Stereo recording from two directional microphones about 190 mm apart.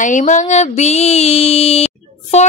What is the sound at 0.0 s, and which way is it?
Speech, 40° left (ahead or behind).